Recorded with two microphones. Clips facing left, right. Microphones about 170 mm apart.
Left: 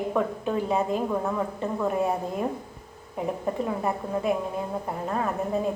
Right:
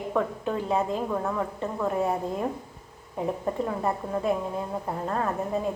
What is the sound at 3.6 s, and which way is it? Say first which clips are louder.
Speech: even; 10° left (ahead or behind).